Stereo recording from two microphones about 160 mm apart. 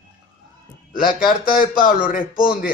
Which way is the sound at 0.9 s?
60° left (ahead or behind).